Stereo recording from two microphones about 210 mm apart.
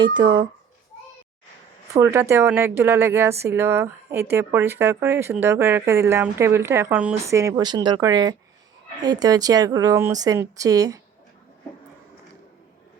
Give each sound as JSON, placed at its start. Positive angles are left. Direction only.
{"t": 0.0, "sound": "a child's voice", "side_deg": -20}
{"t": 2.0, "sound": "speech", "side_deg": -15}